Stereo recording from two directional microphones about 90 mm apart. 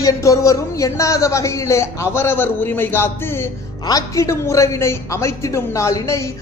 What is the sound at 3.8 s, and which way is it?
A man's voice, 40° left (ahead or behind).